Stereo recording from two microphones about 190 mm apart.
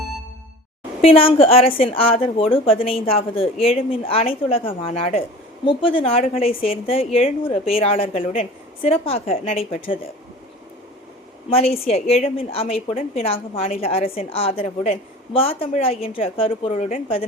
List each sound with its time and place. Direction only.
1.0 s a woman's voice: 30° left (ahead or behind)
11.4 s a woman's voice: 30° left (ahead or behind)